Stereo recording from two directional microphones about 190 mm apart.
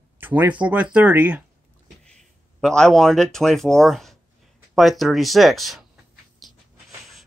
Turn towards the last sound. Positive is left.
turn(degrees=0)  # may be behind; listen again after turning